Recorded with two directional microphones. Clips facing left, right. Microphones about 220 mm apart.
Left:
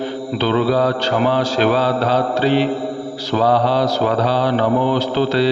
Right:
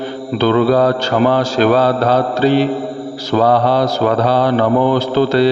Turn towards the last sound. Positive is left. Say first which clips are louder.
# right 4 dB
turn(degrees=-50)  # may be behind; listen again after turning